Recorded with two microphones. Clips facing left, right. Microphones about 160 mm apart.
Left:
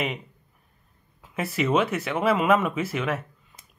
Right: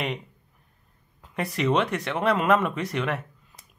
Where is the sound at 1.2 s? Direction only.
Centre (ahead or behind).